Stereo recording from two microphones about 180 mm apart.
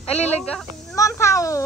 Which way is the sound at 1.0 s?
15° left (ahead or behind).